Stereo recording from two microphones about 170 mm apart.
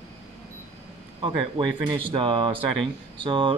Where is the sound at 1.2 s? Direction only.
30° right (ahead or behind).